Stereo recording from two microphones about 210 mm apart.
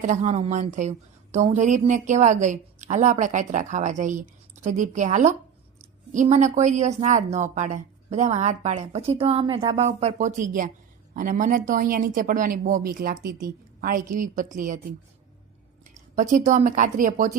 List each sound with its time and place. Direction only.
0.0 s a woman's voice: 35° right (ahead or behind)
16.0 s a woman's voice: 35° right (ahead or behind)